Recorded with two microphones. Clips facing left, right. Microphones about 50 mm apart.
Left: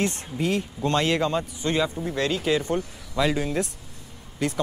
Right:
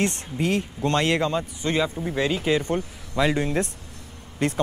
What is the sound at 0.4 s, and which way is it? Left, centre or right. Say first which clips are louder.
Speech: right 1 dB; right.